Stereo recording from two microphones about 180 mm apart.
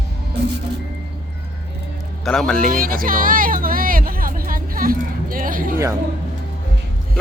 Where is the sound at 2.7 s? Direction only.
50° right (ahead or behind).